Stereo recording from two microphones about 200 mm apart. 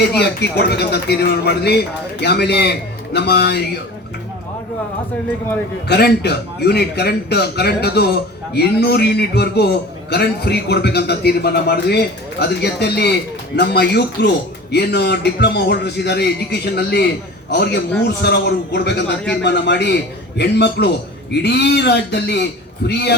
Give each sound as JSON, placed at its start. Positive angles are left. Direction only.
{"t": 0.0, "sound": "speech", "side_deg": 55}
{"t": 5.9, "sound": "a man's voice", "side_deg": 55}